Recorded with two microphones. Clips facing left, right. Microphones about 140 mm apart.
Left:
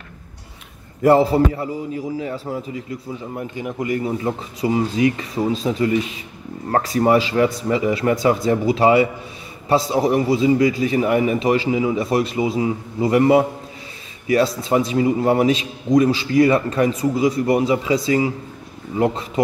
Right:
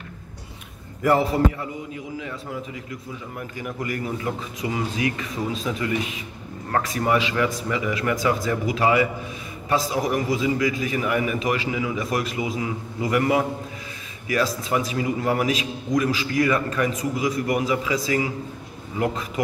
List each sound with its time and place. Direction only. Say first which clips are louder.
1.0 s a man's voice: left 5 dB; 30° left (ahead or behind)